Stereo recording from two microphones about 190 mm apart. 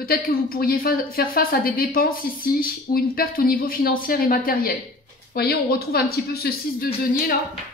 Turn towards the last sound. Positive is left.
turn(degrees=50)  # may be behind; listen again after turning